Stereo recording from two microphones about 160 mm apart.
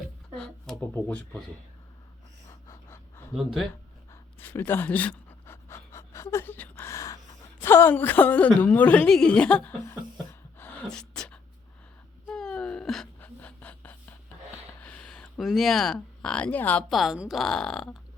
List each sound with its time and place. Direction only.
0.3 s speech: 5° left (ahead or behind)
2.5 s pant: 15° left (ahead or behind)
3.3 s speech: centre (ahead or behind)
4.1 s pant: 15° left (ahead or behind)
7.6 s a woman's voice: 15° left (ahead or behind)
10.6 s a sound: 10° left (ahead or behind)
12.3 s wail: 5° left (ahead or behind)
14.8 s speech: 10° left (ahead or behind)
16.9 s speech: centre (ahead or behind)